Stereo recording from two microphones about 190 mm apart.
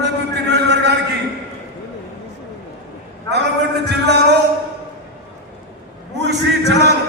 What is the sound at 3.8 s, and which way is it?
Music, 60° right (ahead or behind).